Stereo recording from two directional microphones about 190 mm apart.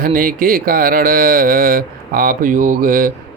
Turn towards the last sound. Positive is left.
turn(degrees=-45)  # may be behind; listen again after turning